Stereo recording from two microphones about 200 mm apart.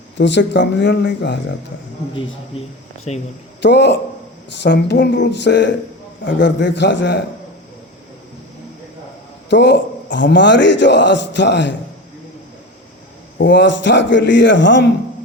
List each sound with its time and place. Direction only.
0.2 s speech: 60° left (ahead or behind)
2.1 s a man's voice: 30° left (ahead or behind)
3.6 s speech: 60° left (ahead or behind)
9.5 s speech: 60° left (ahead or behind)
13.4 s speech: 65° left (ahead or behind)